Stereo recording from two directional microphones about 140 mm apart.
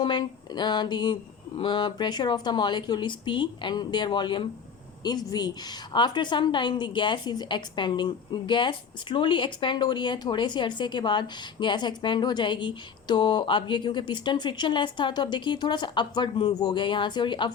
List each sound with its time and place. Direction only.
0.0 s a woman's voice: 35° left (ahead or behind)